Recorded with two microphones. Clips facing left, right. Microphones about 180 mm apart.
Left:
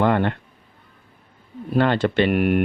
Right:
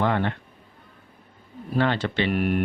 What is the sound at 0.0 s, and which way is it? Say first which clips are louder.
Speech: left 5 dB; 55° left (ahead or behind).